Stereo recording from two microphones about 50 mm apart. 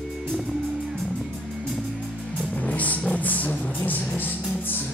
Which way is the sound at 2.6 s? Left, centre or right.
Left.